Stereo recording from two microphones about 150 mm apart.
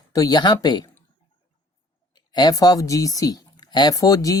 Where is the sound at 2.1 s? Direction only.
30° left (ahead or behind).